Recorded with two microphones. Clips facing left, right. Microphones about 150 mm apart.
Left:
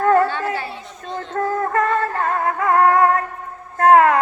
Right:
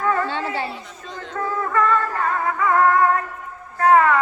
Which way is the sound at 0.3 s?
20° right (ahead or behind).